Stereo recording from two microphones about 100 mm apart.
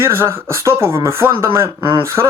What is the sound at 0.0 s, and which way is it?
Speech, 25° right (ahead or behind).